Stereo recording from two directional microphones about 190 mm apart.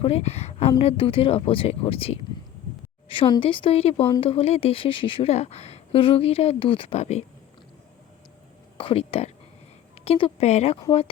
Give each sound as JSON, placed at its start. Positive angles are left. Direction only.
{"t": 0.0, "sound": "speech", "side_deg": 35}
{"t": 8.8, "sound": "speech", "side_deg": 30}